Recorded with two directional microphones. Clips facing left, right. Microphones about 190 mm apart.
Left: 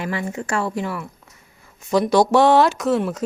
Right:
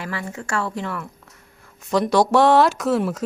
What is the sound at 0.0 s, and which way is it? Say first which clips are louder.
Speech: left 4 dB; 20° left (ahead or behind).